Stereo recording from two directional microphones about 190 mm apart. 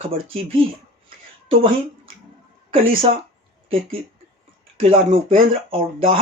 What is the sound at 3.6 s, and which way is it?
Speech, 30° right (ahead or behind).